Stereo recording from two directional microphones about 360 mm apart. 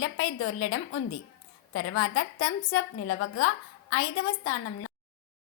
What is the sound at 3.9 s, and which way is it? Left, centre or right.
Speech, left.